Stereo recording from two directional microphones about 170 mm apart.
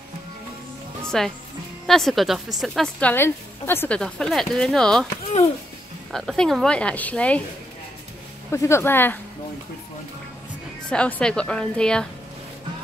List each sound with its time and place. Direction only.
1.0 s speech: centre (ahead or behind)
5.1 s speech: 40° left (ahead or behind)
6.1 s speech: 5° left (ahead or behind)
8.5 s speech: 15° left (ahead or behind)
10.9 s speech: 5° left (ahead or behind)